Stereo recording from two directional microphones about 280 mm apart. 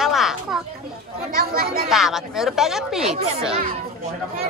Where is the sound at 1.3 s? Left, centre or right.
Right.